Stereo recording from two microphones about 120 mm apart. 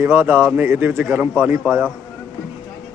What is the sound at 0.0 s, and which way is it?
A man's voice, 20° right (ahead or behind).